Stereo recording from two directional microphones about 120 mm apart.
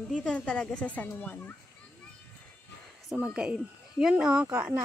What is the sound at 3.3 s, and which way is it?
Speech, 5° right (ahead or behind).